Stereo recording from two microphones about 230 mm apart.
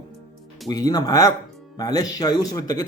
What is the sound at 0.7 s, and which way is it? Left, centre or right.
Speech, centre.